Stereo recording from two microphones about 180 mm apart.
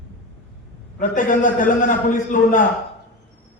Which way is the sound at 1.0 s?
45° left (ahead or behind).